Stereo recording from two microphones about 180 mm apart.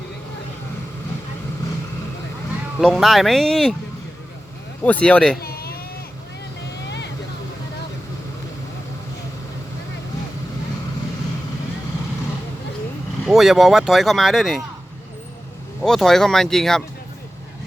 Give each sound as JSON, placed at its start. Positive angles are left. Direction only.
{"t": 2.8, "sound": "speech", "side_deg": 0}
{"t": 4.8, "sound": "speech", "side_deg": 10}
{"t": 5.4, "sound": "baby cry", "side_deg": 60}
{"t": 13.2, "sound": "speech", "side_deg": 0}
{"t": 15.8, "sound": "speech", "side_deg": 0}